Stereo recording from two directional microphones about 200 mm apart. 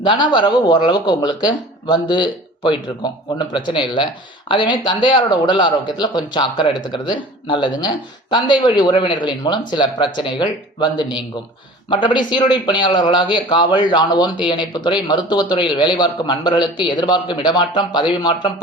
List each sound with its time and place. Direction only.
0.0 s speech: 20° left (ahead or behind)